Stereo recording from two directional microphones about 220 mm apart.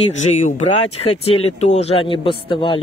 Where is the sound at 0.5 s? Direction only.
30° left (ahead or behind).